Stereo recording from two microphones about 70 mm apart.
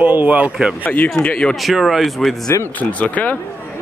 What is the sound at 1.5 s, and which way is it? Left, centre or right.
Speech, centre.